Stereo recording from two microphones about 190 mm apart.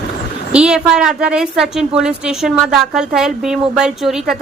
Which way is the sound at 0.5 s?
5° right (ahead or behind).